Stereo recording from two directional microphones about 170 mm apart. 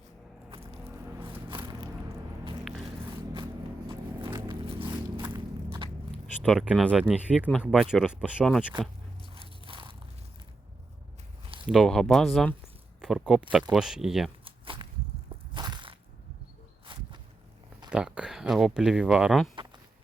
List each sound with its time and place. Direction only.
0.5 s a sound: 35° right (ahead or behind)
4.4 s music: 30° right (ahead or behind)
6.4 s speech: centre (ahead or behind)
9.3 s biting: 30° right (ahead or behind)
11.7 s speech: centre (ahead or behind)
14.4 s walk: 30° right (ahead or behind)
15.5 s crushing: 25° right (ahead or behind)
16.8 s walk: 30° right (ahead or behind)
17.9 s speech: 5° right (ahead or behind)